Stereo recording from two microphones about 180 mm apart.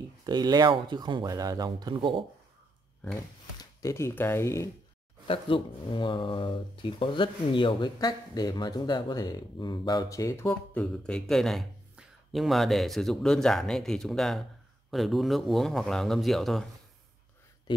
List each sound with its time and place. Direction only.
0.2 s speech: 20° right (ahead or behind)
3.5 s speech: 15° left (ahead or behind)
5.2 s speech: 30° left (ahead or behind); by 16.6 s centre (ahead or behind)